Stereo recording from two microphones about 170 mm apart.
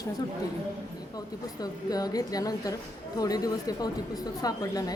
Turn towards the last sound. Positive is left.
turn(degrees=20)  # may be behind; listen again after turning